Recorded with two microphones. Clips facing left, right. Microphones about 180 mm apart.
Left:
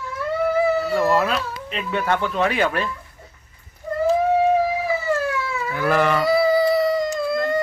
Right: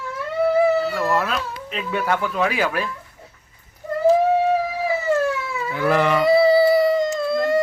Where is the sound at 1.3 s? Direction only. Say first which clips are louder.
Left 2 dB; centre (ahead or behind).